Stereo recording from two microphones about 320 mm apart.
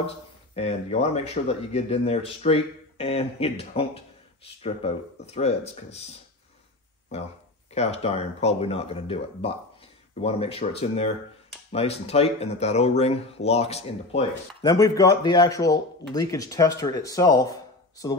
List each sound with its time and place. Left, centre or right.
0.6 s speech: centre
7.1 s speech: left